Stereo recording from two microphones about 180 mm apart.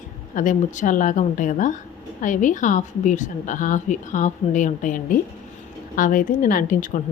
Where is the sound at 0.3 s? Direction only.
45° left (ahead or behind).